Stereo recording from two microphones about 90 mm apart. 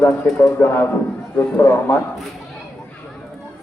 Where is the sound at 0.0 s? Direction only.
30° left (ahead or behind).